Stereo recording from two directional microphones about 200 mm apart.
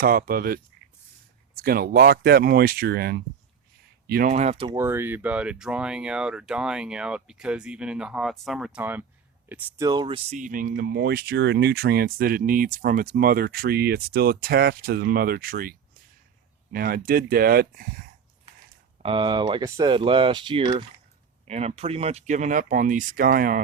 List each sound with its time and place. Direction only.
0.0 s speech: 45° right (ahead or behind)
4.3 s speech: 35° right (ahead or behind)
4.8 s speech: 10° right (ahead or behind); by 15.7 s 45° right (ahead or behind)
16.7 s speech: 50° right (ahead or behind)
19.0 s speech: 25° right (ahead or behind); by 23.6 s 45° right (ahead or behind)